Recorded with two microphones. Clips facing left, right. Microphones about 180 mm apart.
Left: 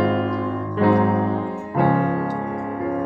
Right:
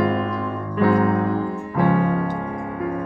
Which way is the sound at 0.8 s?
25° left (ahead or behind).